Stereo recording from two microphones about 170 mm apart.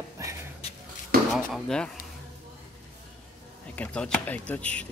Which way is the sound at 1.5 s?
5° left (ahead or behind).